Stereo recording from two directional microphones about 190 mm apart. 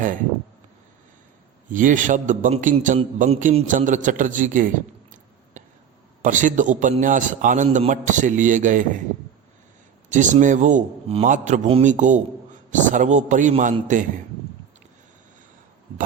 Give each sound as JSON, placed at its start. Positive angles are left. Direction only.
{"t": 0.0, "sound": "a man's voice", "side_deg": -45}
{"t": 1.7, "sound": "a man's voice", "side_deg": -45}
{"t": 5.6, "sound": "a sound", "side_deg": -40}
{"t": 6.2, "sound": "a man's voice", "side_deg": -40}
{"t": 10.1, "sound": "a man's voice", "side_deg": -40}